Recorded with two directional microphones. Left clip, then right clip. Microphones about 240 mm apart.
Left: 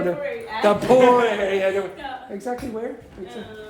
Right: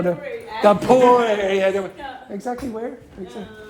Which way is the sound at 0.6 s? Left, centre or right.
Right.